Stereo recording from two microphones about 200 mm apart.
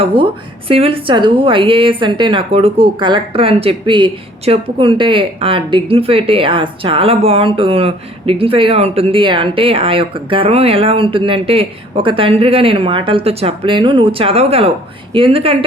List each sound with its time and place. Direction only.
0.0 s speech: 25° right (ahead or behind)